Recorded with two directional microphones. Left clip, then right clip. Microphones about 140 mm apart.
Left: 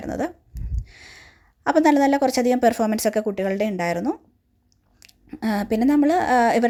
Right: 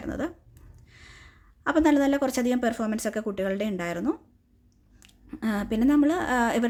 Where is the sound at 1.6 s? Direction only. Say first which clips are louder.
Left 5 dB; 30° left (ahead or behind).